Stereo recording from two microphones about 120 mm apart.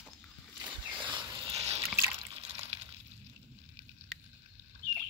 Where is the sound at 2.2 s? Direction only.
45° right (ahead or behind).